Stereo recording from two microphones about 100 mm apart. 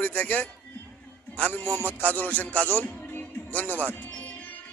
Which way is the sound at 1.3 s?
20° left (ahead or behind).